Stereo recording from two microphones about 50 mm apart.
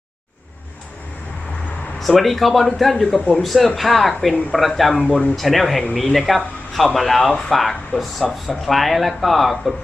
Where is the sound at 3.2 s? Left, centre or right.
Left.